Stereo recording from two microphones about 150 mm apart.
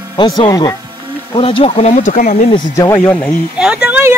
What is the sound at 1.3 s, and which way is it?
Speech, 35° left (ahead or behind).